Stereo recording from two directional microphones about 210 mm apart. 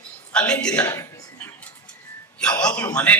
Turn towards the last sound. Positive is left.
turn(degrees=5)  # may be behind; listen again after turning